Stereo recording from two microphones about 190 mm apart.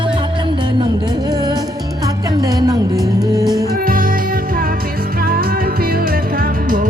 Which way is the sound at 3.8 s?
50° right (ahead or behind).